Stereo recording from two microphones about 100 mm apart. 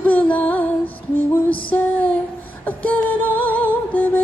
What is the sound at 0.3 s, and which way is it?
Music, 15° left (ahead or behind).